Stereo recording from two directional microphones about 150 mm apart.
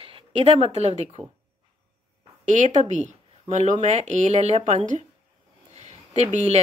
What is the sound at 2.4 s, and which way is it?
Speech, 55° right (ahead or behind).